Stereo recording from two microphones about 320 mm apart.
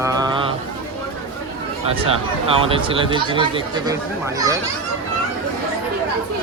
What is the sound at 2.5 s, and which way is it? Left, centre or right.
Speech, centre.